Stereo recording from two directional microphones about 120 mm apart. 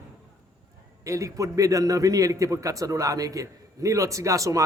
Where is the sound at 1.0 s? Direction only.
25° right (ahead or behind).